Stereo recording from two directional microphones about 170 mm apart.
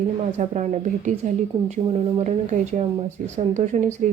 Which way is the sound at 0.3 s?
45° right (ahead or behind).